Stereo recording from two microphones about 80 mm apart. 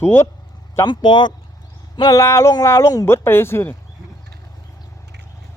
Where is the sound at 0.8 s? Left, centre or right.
Left.